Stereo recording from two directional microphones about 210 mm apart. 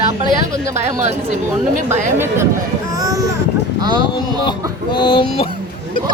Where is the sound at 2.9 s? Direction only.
15° right (ahead or behind).